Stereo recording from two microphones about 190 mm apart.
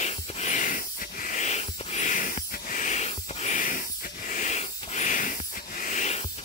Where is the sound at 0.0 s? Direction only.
40° left (ahead or behind).